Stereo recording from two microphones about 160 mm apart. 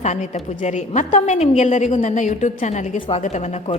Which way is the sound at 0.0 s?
45° left (ahead or behind).